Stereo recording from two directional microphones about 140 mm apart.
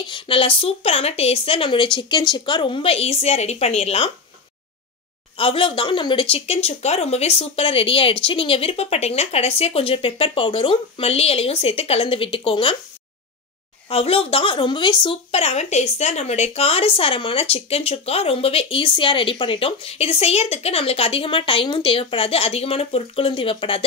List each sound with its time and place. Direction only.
0.0 s a woman's voice: 40° left (ahead or behind)
5.4 s speech: 40° left (ahead or behind)
13.8 s speech: 45° left (ahead or behind)